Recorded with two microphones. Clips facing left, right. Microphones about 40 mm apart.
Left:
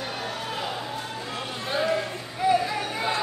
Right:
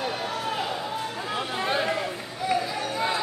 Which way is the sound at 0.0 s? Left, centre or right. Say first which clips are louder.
Right 3 dB; centre.